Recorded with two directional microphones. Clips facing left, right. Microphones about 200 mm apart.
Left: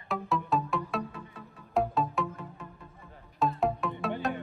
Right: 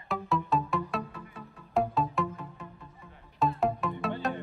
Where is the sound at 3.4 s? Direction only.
Centre (ahead or behind).